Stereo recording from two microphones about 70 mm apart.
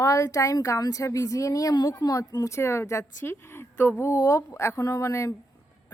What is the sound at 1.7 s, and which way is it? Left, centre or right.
A woman's voice, left.